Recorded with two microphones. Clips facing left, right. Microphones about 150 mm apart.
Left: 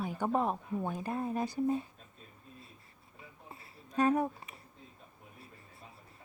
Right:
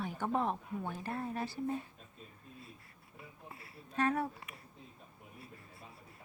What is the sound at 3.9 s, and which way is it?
Speech, 15° left (ahead or behind).